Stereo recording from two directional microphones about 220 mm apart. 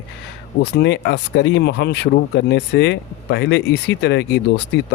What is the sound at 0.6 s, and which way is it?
Speech, 50° left (ahead or behind).